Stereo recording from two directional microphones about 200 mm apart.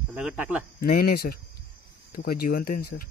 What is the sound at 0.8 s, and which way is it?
Speech, 50° left (ahead or behind).